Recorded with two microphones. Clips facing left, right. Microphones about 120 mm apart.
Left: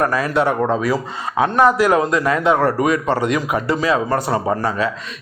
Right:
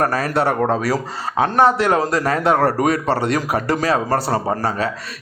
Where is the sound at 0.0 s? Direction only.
40° right (ahead or behind).